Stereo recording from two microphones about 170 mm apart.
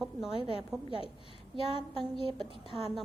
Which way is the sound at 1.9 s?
30° right (ahead or behind).